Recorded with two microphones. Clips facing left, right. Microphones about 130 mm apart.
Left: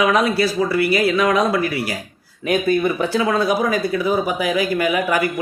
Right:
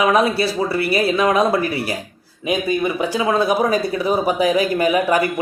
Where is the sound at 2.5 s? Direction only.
15° right (ahead or behind).